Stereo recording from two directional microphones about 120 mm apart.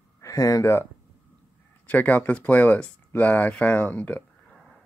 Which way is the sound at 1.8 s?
15° left (ahead or behind).